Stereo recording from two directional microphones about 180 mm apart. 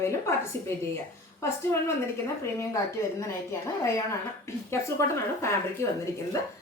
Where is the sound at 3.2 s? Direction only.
15° left (ahead or behind).